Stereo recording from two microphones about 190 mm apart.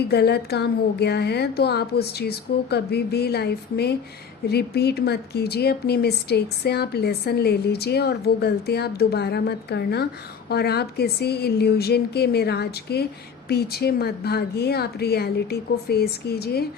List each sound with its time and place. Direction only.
0.0 s speech: 60° left (ahead or behind)